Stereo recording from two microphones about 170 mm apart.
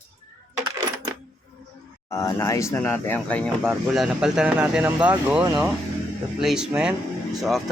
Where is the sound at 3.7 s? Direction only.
5° right (ahead or behind).